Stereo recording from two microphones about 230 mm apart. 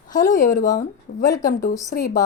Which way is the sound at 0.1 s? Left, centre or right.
Left.